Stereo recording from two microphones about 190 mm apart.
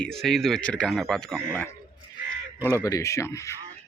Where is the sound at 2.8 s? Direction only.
15° left (ahead or behind).